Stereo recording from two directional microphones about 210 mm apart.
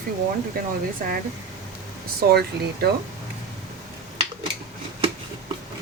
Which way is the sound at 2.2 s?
50° right (ahead or behind).